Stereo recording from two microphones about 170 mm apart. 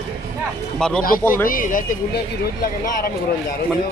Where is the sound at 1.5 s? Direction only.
55° left (ahead or behind).